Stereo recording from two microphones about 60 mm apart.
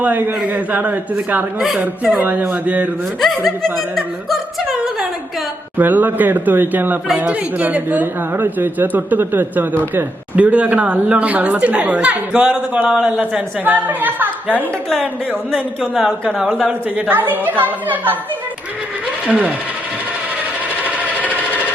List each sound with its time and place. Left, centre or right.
0.0 s a woman's voice: right
1.5 s speech: centre
2.2 s a woman's voice: right
3.2 s speech: centre
5.7 s a man's voice: right
13.7 s a man's voice: right
17.1 s a man's voice: right
19.3 s a woman's voice: right
20.8 s sewing machine: right